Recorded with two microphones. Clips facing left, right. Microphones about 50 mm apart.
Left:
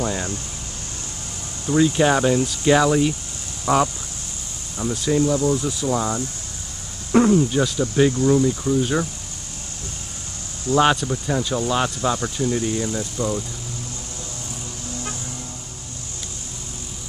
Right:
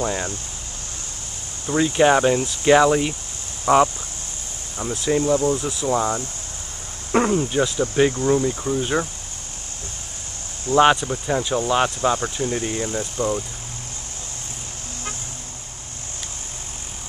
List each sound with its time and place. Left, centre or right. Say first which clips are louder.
0.0 s speech: right 1 dB; right
1.7 s speech: even; right
4.8 s speech: left 1 dB; centre
5.1 s speech: even; right
5.6 s speech: right 1 dB; centre
7.1 s speech: left 3 dB; right
10.8 s speech: right 3 dB; centre